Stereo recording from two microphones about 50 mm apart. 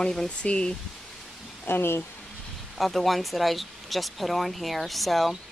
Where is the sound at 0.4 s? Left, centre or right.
Centre.